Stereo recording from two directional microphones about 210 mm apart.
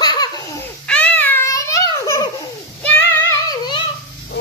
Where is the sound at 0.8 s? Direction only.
5° left (ahead or behind).